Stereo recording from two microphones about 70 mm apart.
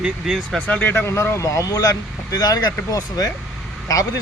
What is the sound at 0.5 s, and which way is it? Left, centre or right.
Speech, left.